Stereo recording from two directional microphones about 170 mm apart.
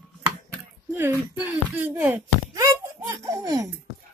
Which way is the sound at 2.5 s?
20° right (ahead or behind).